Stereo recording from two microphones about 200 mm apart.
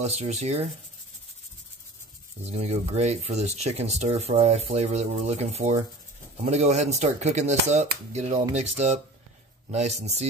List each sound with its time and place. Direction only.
0.0 s speech: 35° right (ahead or behind)
2.4 s speech: 30° right (ahead or behind)